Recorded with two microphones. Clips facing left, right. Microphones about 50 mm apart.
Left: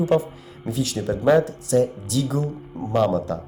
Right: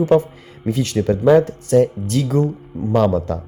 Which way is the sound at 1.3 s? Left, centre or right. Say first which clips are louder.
Right 5 dB; right.